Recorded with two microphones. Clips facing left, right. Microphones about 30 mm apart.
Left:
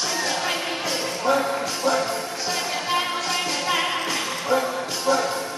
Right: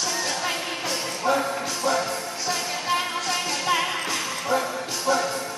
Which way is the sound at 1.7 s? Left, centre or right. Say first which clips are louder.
Left 2 dB; centre.